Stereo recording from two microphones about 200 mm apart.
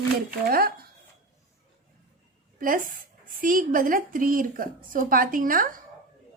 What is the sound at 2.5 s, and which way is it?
A woman's voice, 45° right (ahead or behind).